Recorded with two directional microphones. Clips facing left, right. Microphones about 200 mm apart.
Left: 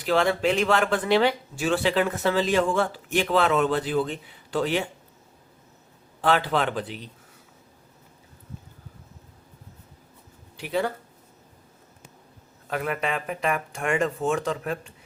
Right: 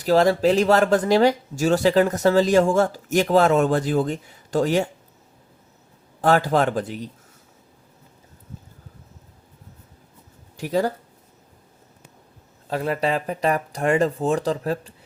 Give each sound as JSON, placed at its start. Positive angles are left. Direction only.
{"t": 0.0, "sound": "speech", "side_deg": -40}
{"t": 6.2, "sound": "speech", "side_deg": -45}
{"t": 10.6, "sound": "speech", "side_deg": -40}
{"t": 12.6, "sound": "speech", "side_deg": -30}